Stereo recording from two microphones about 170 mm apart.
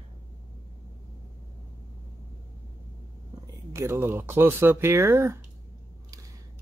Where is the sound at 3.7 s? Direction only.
15° right (ahead or behind).